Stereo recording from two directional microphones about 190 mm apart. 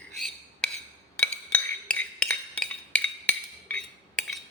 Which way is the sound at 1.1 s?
5° left (ahead or behind).